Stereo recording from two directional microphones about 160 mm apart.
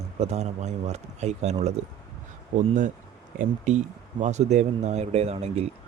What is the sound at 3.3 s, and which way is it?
Speech, 45° right (ahead or behind).